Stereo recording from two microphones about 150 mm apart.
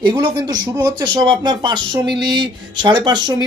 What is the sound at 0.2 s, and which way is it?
Speech, 30° right (ahead or behind).